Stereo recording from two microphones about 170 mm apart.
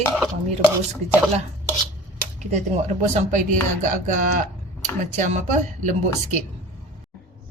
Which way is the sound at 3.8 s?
50° right (ahead or behind).